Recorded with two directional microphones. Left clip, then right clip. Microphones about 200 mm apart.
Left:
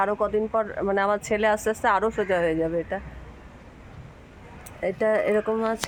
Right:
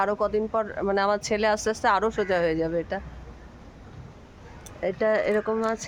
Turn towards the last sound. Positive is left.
turn(degrees=5)  # may be behind; listen again after turning